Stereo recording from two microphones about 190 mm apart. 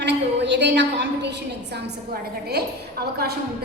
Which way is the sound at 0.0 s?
65° right (ahead or behind).